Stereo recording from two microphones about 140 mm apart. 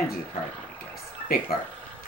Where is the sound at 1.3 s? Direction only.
90° left.